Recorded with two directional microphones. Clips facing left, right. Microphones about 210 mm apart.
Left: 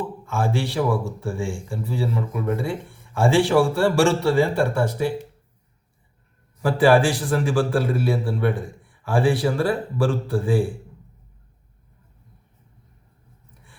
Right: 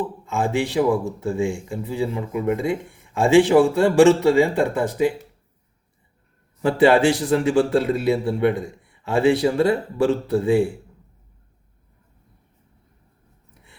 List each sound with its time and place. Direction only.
0.3 s speech: 20° right (ahead or behind)
6.6 s speech: 25° right (ahead or behind)